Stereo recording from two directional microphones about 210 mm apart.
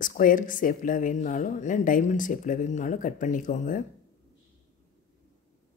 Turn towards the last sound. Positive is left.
turn(degrees=35)  # may be behind; listen again after turning